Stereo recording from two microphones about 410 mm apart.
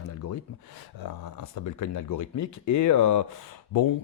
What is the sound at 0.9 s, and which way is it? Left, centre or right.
Speech, left.